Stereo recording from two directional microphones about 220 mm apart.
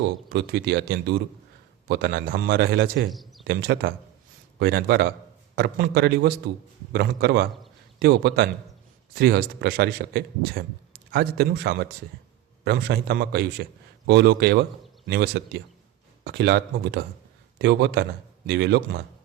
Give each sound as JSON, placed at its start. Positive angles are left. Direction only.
{"t": 0.0, "sound": "speech", "side_deg": -50}
{"t": 3.1, "sound": "speech", "side_deg": 0}
{"t": 3.4, "sound": "speech", "side_deg": -45}